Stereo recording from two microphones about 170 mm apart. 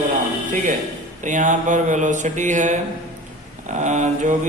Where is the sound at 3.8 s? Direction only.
45° right (ahead or behind).